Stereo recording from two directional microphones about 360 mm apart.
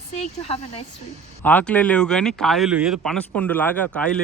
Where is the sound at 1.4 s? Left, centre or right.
Centre.